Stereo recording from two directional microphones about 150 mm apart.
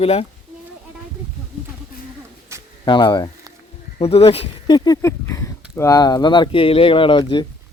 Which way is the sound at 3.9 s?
40° left (ahead or behind).